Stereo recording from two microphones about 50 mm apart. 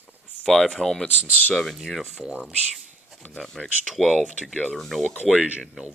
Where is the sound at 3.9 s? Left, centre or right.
Centre.